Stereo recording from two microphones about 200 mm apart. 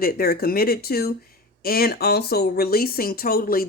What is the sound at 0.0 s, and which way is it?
Speech, 50° left (ahead or behind).